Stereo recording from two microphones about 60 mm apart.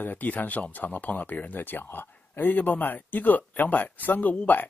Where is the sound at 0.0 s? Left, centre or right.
Left.